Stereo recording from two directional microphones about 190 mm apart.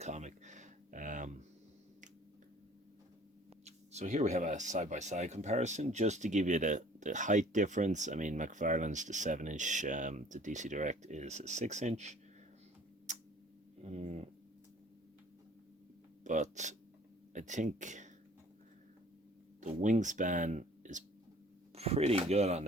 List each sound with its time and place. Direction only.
0.0 s a sound: 40° right (ahead or behind)
3.6 s speech: 35° right (ahead or behind)
13.8 s speech: 35° right (ahead or behind)
16.2 s speech: 40° right (ahead or behind)
19.6 s speech: 40° right (ahead or behind)